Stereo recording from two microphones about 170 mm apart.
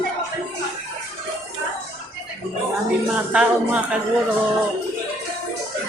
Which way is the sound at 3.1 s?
5° right (ahead or behind).